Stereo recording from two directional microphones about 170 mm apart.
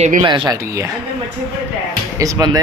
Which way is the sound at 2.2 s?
20° right (ahead or behind).